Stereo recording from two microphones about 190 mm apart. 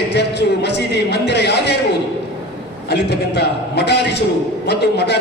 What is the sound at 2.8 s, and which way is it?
A man's voice, 60° left (ahead or behind).